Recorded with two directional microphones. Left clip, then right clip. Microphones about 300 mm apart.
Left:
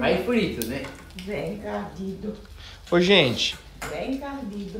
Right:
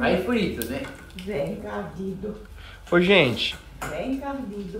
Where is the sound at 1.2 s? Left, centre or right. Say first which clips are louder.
Right 2 dB; centre.